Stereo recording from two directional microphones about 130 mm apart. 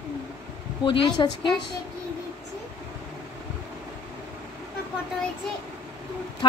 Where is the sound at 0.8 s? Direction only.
40° left (ahead or behind).